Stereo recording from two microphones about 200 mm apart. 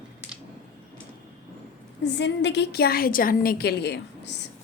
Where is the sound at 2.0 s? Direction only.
60° left (ahead or behind).